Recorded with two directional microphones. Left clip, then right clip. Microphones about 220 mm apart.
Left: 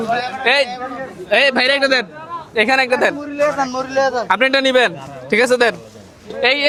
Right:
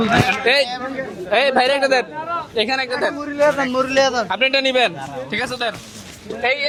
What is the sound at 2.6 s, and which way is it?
Speech, 55° left (ahead or behind).